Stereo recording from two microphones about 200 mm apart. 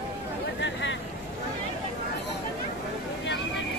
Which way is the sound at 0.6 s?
65° left (ahead or behind).